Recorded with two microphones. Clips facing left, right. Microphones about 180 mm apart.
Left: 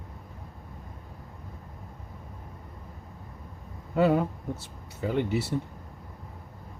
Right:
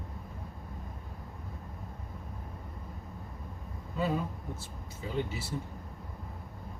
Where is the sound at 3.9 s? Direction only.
70° left (ahead or behind).